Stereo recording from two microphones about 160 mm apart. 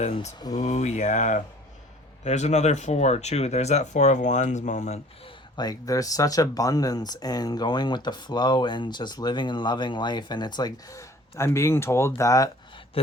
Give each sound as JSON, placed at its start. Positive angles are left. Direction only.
{"t": 0.0, "sound": "speech", "side_deg": 45}
{"t": 0.3, "sound": "speech", "side_deg": 25}
{"t": 0.6, "sound": "speech", "side_deg": 45}
{"t": 5.5, "sound": "speech", "side_deg": 25}